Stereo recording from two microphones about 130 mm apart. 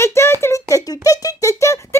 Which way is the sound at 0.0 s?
20° left (ahead or behind).